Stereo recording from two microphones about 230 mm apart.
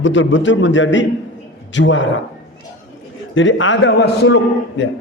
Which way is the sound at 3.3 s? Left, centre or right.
Left.